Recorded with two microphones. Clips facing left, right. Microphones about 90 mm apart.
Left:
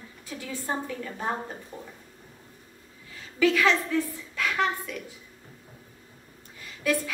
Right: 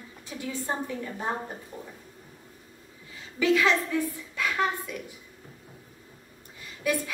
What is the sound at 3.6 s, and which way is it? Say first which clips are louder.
A woman's voice: left 1 dB; 15° right (ahead or behind).